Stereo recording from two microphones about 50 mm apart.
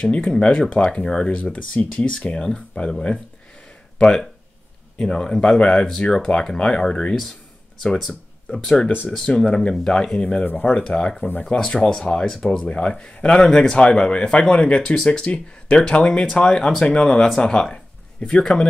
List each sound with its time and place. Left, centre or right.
0.3 s speech: left